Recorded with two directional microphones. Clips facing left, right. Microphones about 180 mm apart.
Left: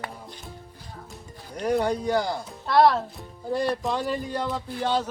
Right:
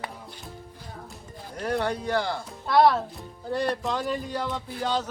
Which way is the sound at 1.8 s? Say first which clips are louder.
Left 2 dB; 10° left (ahead or behind).